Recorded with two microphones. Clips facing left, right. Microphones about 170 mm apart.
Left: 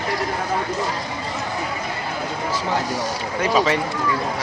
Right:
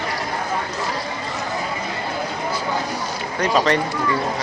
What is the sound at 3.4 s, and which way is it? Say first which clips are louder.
Speech: right 1 dB; 5° left (ahead or behind).